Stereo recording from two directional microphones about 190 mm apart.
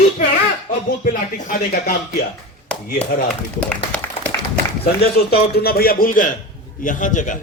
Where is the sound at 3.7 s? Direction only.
10° left (ahead or behind).